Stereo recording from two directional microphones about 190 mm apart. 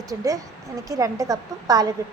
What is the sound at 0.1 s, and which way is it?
A woman's voice, 20° right (ahead or behind).